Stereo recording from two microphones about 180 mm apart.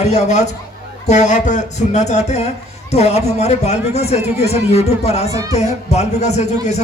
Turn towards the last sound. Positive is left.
turn(degrees=40)  # may be behind; listen again after turning